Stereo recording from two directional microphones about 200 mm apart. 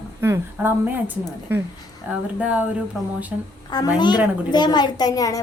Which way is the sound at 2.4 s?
5° right (ahead or behind).